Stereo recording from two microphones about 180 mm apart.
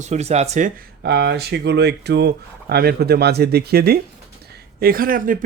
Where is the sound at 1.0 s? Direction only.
65° right (ahead or behind).